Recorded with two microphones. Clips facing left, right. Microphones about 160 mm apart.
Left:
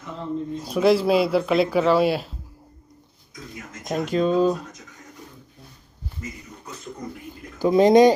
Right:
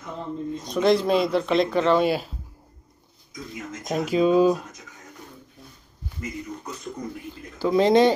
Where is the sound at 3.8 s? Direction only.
5° right (ahead or behind).